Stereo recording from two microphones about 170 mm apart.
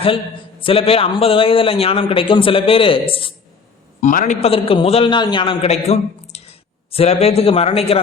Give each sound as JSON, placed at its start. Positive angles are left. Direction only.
{"t": 0.6, "sound": "a man's voice", "side_deg": 35}
{"t": 4.0, "sound": "a man's voice", "side_deg": 50}
{"t": 4.4, "sound": "a man's voice", "side_deg": 35}